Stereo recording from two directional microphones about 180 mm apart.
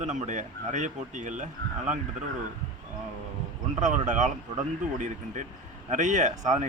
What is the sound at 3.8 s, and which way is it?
Speech, 45° right (ahead or behind).